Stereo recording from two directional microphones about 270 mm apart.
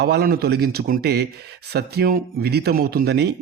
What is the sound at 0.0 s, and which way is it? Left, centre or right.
A man's voice, right.